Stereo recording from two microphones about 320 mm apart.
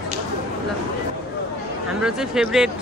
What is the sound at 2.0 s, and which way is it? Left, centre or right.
Speech, centre.